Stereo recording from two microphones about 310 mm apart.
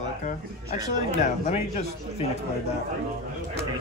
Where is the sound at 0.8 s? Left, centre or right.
Left.